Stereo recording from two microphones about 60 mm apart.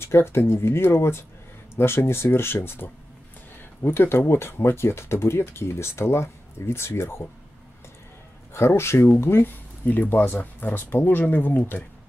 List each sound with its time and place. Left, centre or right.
0.0 s speech: left
8.5 s speech: left
9.8 s speech: left